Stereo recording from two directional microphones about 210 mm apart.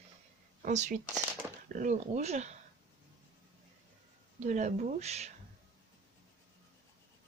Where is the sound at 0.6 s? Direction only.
35° right (ahead or behind).